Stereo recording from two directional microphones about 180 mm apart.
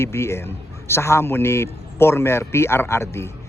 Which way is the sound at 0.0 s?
15° left (ahead or behind).